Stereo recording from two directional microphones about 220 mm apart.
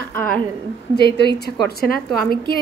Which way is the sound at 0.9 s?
50° left (ahead or behind).